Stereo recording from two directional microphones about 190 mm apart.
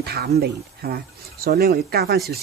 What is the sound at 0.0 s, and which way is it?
Speech, 55° right (ahead or behind).